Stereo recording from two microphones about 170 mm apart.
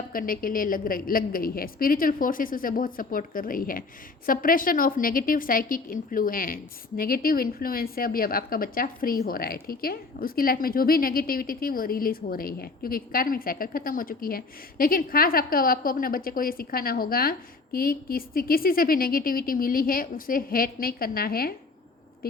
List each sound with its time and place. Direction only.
0.1 s a woman's voice: 55° left (ahead or behind)